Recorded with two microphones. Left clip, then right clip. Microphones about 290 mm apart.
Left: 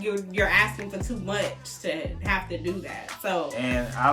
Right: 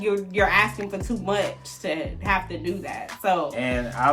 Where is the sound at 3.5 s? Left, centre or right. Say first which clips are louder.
Right 2 dB; centre.